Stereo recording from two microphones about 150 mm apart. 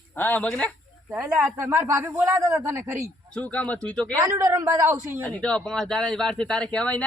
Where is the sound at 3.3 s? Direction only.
10° left (ahead or behind).